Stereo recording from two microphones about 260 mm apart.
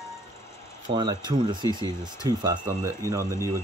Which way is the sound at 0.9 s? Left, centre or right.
Centre.